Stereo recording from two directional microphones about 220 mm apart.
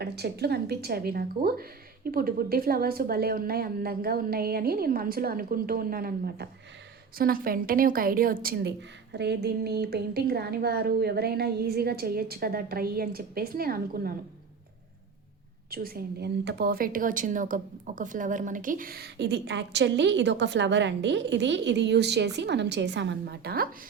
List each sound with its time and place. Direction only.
0.0 s a woman's voice: 45° right (ahead or behind)
15.7 s speech: 40° right (ahead or behind)